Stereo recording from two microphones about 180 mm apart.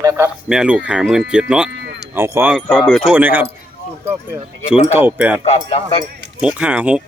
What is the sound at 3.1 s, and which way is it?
Speech, 10° right (ahead or behind).